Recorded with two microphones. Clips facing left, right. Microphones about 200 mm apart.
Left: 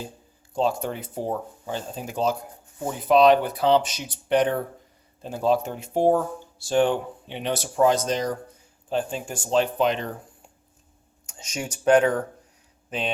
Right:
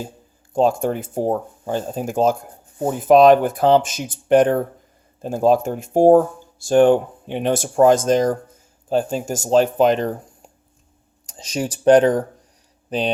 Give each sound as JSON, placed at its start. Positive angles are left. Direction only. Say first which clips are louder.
{"t": 0.5, "sound": "speech", "louder": "right 7 dB", "side_deg": -50}